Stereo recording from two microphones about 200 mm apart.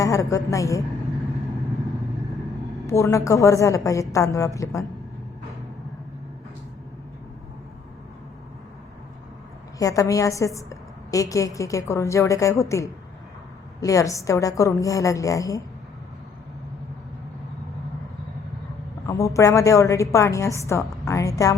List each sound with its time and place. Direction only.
0.0 s a woman's voice: 15° left (ahead or behind)
2.8 s a woman's voice: 15° left (ahead or behind)
9.7 s a woman's voice: 15° left (ahead or behind)
19.0 s a woman's voice: 15° left (ahead or behind)